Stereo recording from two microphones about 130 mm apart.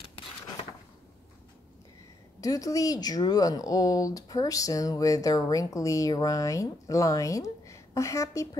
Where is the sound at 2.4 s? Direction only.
25° left (ahead or behind).